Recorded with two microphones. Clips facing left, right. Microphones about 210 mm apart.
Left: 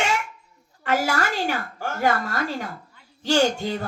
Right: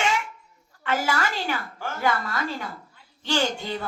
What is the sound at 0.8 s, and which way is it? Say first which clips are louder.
A woman's voice: left 2 dB; 45° left (ahead or behind).